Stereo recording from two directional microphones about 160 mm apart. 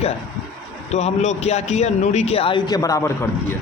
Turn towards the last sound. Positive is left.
turn(degrees=20)  # may be behind; listen again after turning